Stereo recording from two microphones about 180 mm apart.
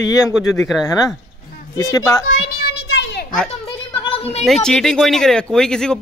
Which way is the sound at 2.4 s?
55° left (ahead or behind).